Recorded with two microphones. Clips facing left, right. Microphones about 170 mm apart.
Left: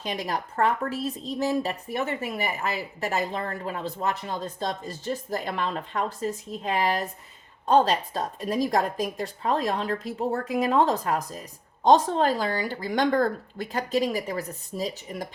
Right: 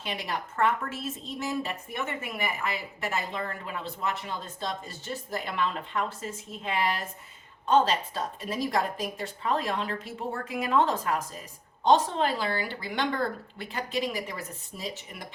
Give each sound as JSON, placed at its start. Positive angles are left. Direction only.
{"t": 0.0, "sound": "a woman's voice", "side_deg": 40}